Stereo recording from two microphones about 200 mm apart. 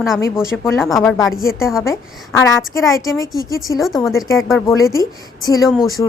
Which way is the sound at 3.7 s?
Centre (ahead or behind).